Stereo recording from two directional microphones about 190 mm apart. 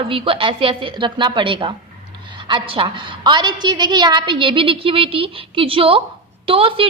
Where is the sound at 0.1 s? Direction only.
30° right (ahead or behind).